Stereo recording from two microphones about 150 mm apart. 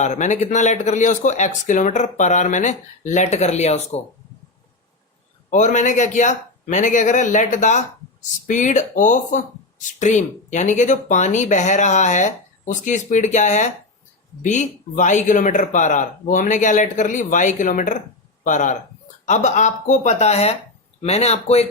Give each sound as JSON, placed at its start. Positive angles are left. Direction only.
{"t": 0.0, "sound": "speech", "side_deg": 55}
{"t": 5.5, "sound": "speech", "side_deg": 55}